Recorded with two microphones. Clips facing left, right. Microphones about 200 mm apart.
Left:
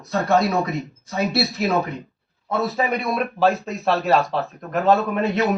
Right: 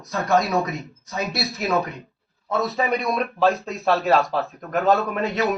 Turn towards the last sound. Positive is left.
turn(degrees=0)  # may be behind; listen again after turning